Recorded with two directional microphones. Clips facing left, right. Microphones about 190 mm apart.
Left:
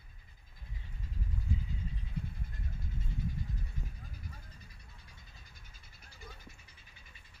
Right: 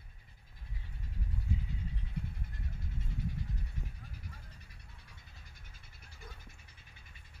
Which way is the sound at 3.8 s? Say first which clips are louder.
Even; 70° right (ahead or behind).